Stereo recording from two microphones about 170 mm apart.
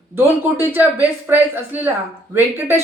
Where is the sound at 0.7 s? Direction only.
10° right (ahead or behind).